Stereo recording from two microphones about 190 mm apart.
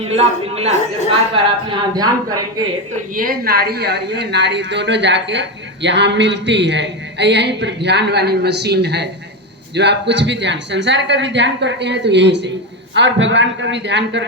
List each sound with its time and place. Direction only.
0.0 s speech: 30° right (ahead or behind)
2.9 s a woman's voice: 50° right (ahead or behind); by 14.3 s 70° right (ahead or behind)